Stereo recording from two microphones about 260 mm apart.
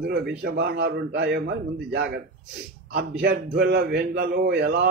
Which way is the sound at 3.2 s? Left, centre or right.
Right.